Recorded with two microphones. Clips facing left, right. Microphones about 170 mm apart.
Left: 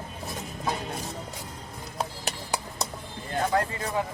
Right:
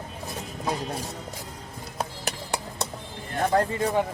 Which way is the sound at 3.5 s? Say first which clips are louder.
Right 7 dB; 30° right (ahead or behind).